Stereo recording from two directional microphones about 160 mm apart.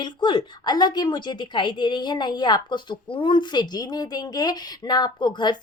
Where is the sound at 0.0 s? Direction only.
30° left (ahead or behind).